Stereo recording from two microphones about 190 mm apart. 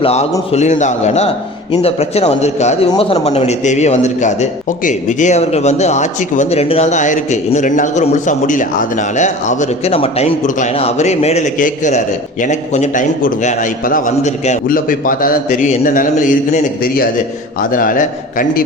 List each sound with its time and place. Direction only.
0.0 s a man's voice: 35° left (ahead or behind)